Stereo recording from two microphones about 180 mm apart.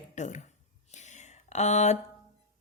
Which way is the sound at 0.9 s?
40° left (ahead or behind).